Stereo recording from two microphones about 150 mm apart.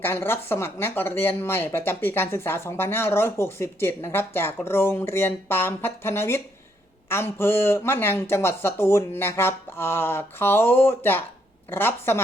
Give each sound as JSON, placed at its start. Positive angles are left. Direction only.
{"t": 0.0, "sound": "speech", "side_deg": 15}